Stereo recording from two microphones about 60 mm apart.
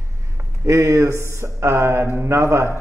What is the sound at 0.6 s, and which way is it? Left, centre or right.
A man's voice, right.